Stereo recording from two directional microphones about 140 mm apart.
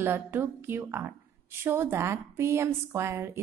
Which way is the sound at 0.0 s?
15° right (ahead or behind).